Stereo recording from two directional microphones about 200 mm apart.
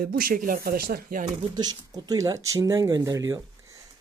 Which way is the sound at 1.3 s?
20° right (ahead or behind).